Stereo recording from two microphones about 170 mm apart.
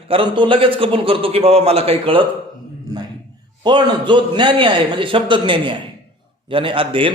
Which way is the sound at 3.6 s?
25° right (ahead or behind).